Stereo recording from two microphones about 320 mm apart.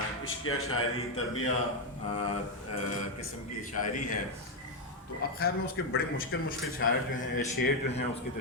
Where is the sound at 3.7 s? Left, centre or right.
Left.